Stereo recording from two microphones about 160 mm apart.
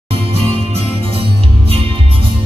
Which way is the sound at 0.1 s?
35° right (ahead or behind).